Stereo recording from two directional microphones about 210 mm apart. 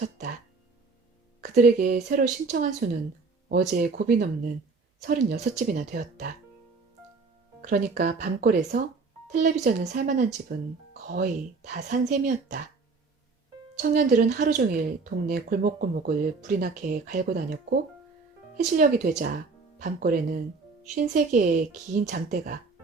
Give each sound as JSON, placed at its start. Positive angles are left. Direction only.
{"t": 1.5, "sound": "a woman's voice", "side_deg": -40}
{"t": 7.6, "sound": "a woman's voice", "side_deg": -45}
{"t": 13.7, "sound": "a woman's voice", "side_deg": -40}